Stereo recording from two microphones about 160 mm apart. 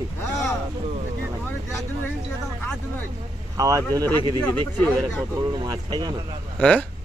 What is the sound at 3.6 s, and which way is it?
Speech, 20° right (ahead or behind).